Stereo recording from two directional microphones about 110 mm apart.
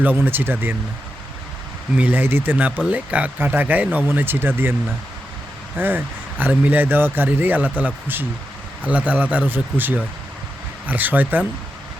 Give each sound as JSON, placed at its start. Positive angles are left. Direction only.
{"t": 0.0, "sound": "speech", "side_deg": -15}
{"t": 2.0, "sound": "speech", "side_deg": -15}
{"t": 5.7, "sound": "speech", "side_deg": -20}